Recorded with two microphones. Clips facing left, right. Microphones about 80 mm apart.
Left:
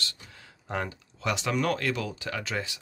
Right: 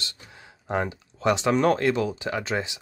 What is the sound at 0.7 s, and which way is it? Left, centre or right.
Speech, right.